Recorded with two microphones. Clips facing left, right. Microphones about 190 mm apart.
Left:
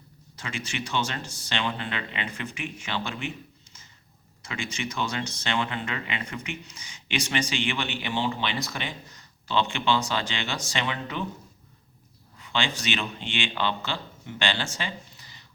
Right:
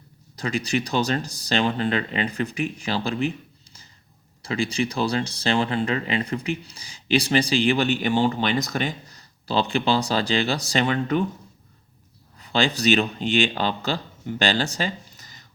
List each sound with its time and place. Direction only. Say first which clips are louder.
0.3 s speech: right 10 dB; 40° right (ahead or behind)
12.4 s a man's voice: right 7 dB; 40° right (ahead or behind)